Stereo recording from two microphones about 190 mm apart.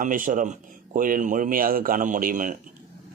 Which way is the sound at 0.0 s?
45° right (ahead or behind).